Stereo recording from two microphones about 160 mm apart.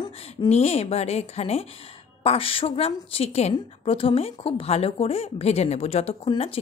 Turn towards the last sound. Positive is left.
turn(degrees=35)  # may be behind; listen again after turning